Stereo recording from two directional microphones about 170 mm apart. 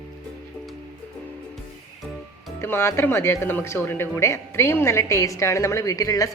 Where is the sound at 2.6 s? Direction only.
15° left (ahead or behind).